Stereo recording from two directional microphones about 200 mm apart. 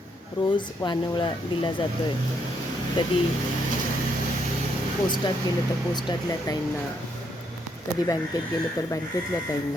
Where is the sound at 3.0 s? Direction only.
20° left (ahead or behind).